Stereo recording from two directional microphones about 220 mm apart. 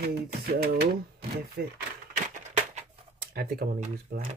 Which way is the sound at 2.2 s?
40° right (ahead or behind).